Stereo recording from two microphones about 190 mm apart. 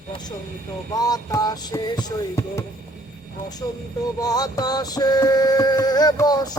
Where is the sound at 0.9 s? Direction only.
20° left (ahead or behind).